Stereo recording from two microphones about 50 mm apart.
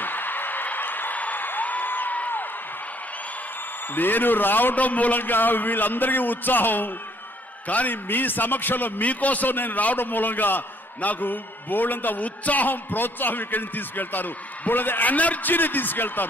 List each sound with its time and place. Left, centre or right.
0.0 s music: left
3.9 s a man's voice: left